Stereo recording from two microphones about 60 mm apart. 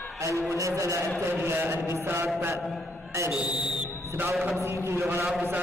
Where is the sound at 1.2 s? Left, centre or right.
Right.